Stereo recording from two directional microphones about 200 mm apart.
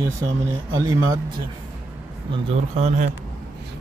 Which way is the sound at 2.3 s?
30° right (ahead or behind).